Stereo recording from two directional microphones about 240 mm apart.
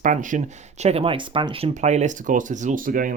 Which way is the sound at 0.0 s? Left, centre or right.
Right.